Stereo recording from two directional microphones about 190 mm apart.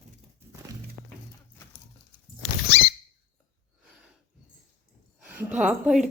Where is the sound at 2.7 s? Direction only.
70° left (ahead or behind).